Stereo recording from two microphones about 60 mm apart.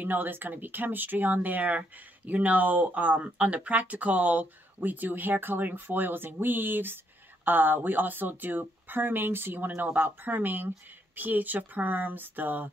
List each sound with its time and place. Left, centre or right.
0.0 s speech: right